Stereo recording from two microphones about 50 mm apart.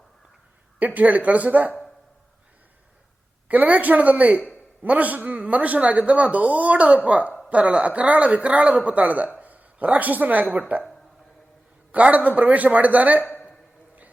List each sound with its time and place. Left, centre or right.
0.8 s speech: right
3.5 s speech: right
11.9 s speech: right
13.2 s a sound: left